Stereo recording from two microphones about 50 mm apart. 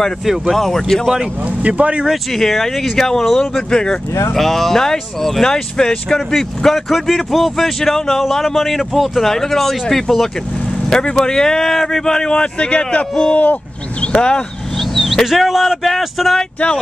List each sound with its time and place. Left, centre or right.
0.2 s speech: centre
0.7 s speech: centre
1.6 s speech: right
2.3 s speech: centre; by 13.6 s left
14.0 s speech: centre
14.8 s speech: centre